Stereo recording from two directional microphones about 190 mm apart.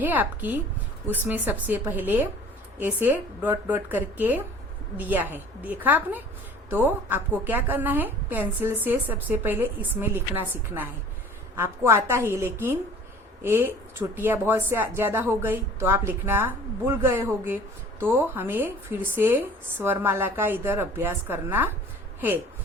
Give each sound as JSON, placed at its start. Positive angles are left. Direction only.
{"t": 0.0, "sound": "a woman's voice", "side_deg": -10}